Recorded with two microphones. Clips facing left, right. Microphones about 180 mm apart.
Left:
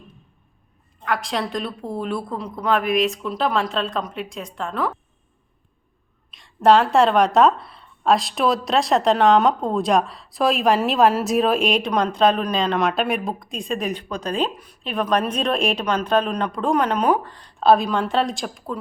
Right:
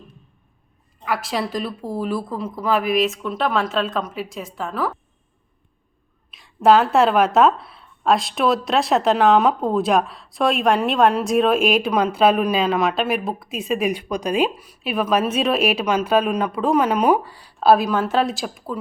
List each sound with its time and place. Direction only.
1.0 s speech: 5° right (ahead or behind)
6.3 s speech: centre (ahead or behind)